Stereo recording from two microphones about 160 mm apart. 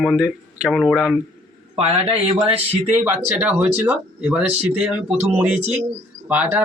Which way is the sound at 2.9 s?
15° right (ahead or behind).